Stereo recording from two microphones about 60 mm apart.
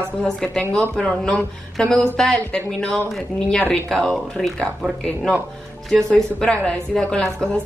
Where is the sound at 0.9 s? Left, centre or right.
Centre.